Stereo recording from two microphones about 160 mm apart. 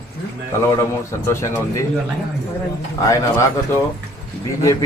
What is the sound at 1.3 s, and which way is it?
Speech, 20° left (ahead or behind).